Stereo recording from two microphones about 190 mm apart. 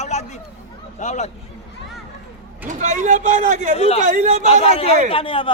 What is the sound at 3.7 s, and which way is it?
Speech, 30° left (ahead or behind).